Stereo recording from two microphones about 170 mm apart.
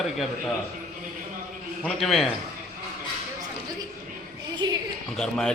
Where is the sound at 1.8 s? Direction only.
Centre (ahead or behind).